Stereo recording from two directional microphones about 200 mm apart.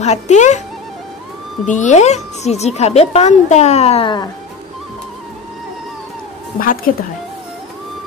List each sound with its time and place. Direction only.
0.0 s speech: 35° left (ahead or behind)
1.7 s speech: 35° left (ahead or behind)
6.6 s speech: 45° left (ahead or behind)